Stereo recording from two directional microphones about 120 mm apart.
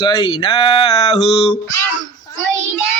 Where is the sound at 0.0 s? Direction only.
45° left (ahead or behind).